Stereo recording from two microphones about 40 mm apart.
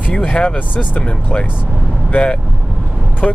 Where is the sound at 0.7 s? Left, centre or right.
Left.